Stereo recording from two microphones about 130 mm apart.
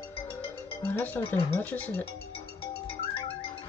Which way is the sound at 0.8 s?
10° left (ahead or behind).